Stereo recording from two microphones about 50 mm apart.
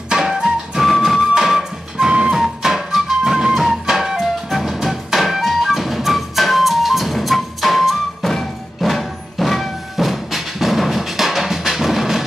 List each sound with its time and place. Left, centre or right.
0.1 s music: centre
2.3 s music: centre